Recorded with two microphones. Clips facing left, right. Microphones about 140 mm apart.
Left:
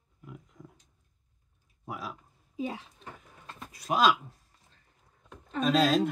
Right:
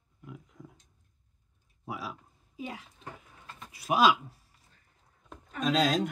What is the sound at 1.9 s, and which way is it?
Speech, centre (ahead or behind).